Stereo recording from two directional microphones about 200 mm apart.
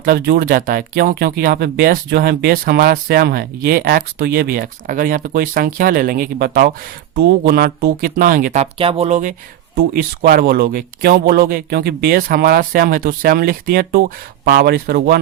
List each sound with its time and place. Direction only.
0.0 s speech: 50° right (ahead or behind)
9.7 s speech: 45° right (ahead or behind)